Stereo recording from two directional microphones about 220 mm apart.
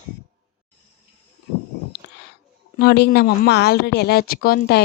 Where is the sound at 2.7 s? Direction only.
45° left (ahead or behind).